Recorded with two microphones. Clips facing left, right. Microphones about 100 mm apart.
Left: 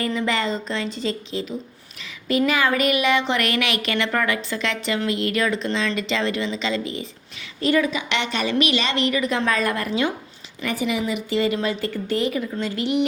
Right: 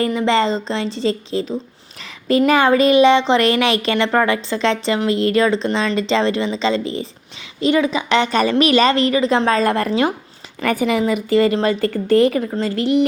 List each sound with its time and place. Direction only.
0.0 s a woman's voice: 25° right (ahead or behind)
7.6 s a woman's voice: 20° right (ahead or behind)
7.9 s a woman's voice: 35° right (ahead or behind)
10.6 s speech: 50° right (ahead or behind)